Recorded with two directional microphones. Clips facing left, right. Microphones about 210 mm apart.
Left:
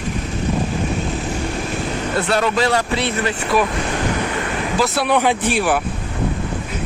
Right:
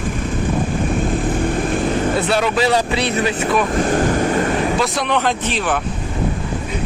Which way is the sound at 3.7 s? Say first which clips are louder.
Right 5 dB; 45° right (ahead or behind).